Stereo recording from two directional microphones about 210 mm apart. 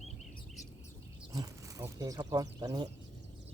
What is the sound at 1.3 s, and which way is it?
Speech, 15° right (ahead or behind).